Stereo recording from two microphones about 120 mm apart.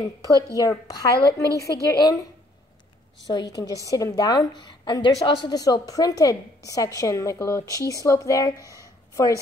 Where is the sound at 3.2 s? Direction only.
35° left (ahead or behind).